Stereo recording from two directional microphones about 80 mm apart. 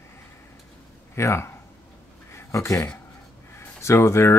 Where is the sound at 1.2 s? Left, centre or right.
Left.